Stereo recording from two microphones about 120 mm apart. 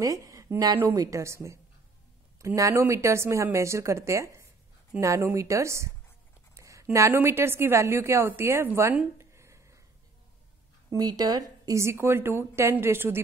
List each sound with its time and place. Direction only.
0.0 s a woman's voice: 30° right (ahead or behind)
9.2 s a sound: 25° right (ahead or behind)
10.9 s a woman's voice: 35° right (ahead or behind)